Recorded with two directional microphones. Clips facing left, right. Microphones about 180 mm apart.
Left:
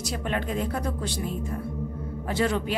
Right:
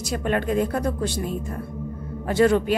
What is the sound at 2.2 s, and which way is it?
Speech, 50° right (ahead or behind).